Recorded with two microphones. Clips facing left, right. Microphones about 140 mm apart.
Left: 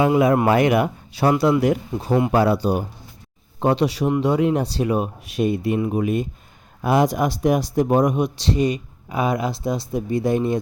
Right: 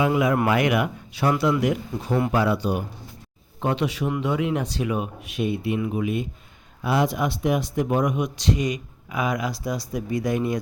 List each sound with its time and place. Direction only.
0.1 s speech: 30° left (ahead or behind)